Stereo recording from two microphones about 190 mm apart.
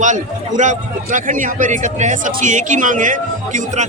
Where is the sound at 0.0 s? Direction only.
40° right (ahead or behind).